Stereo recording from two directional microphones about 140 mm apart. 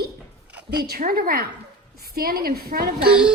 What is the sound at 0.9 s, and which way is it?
A woman's voice, 90° right.